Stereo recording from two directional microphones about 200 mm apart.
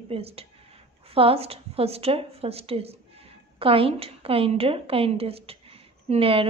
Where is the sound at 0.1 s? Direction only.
30° right (ahead or behind).